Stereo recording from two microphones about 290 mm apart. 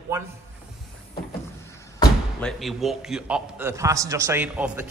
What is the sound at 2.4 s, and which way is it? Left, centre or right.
A man's voice, centre.